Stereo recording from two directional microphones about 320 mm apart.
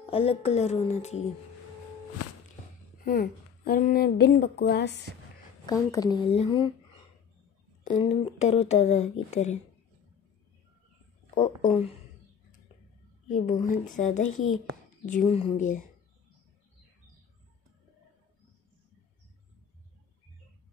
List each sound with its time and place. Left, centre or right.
0.1 s a woman's voice: centre
2.2 s walk: left
3.1 s a woman's voice: left
5.7 s a woman's voice: centre
7.8 s a woman's voice: centre
11.3 s a woman's voice: centre
13.3 s a woman's voice: left